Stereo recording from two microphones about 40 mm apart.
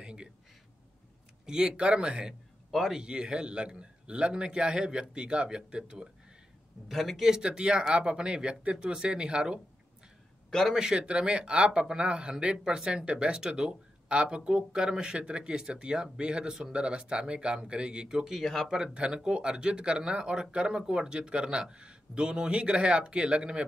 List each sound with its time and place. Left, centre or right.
0.0 s a sound: right
1.4 s speech: centre
1.8 s speech: right
6.9 s speech: centre
7.2 s speech: centre
10.7 s speech: centre
18.3 s speech: centre
18.9 s speech: right